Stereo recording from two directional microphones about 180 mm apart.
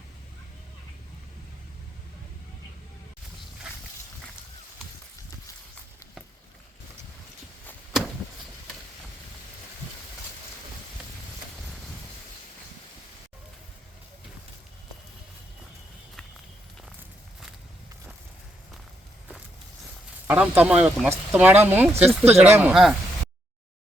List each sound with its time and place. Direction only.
3.7 s walk: 5° right (ahead or behind)
11.5 s a sound: centre (ahead or behind)
20.2 s speech: 10° right (ahead or behind)
21.9 s speech: 35° right (ahead or behind)
22.3 s speech: 10° right (ahead or behind)
22.7 s speech: centre (ahead or behind)